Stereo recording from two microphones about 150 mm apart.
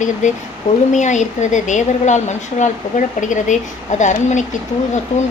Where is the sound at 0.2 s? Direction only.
55° left (ahead or behind).